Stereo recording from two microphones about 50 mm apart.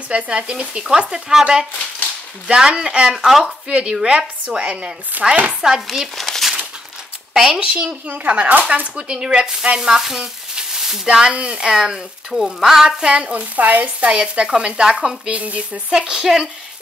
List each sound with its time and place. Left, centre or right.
0.1 s chopping: right
2.4 s speech: centre
3.4 s chopping: centre
6.1 s a sound: centre
7.3 s speech: centre
8.3 s chopping: right
8.8 s sizzle: right
11.1 s speech: centre
12.8 s chopping: centre
13.8 s chopping: centre
15.3 s speech: right; by 16.4 s centre